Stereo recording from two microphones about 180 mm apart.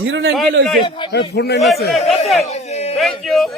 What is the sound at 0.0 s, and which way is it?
Speech, 90° right.